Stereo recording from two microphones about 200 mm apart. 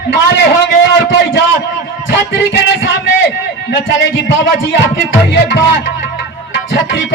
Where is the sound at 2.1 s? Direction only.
60° left (ahead or behind).